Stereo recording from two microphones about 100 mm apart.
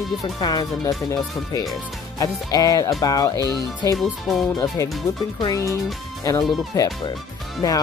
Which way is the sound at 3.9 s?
Centre (ahead or behind).